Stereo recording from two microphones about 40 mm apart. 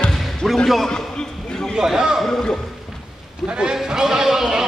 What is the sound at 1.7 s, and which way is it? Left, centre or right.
Speech, centre.